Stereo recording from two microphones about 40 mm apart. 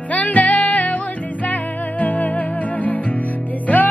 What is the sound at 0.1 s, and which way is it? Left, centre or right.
Music, left.